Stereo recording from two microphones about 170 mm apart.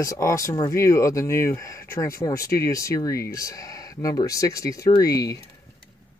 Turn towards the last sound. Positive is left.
turn(degrees=20)  # may be behind; listen again after turning